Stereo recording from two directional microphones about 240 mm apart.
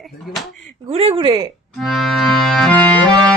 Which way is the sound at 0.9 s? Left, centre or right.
Right.